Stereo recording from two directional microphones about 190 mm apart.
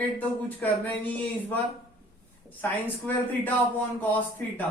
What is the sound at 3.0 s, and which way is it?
A man's voice, 10° left (ahead or behind).